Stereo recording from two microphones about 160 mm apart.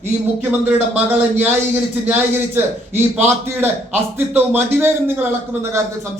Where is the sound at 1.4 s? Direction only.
10° right (ahead or behind).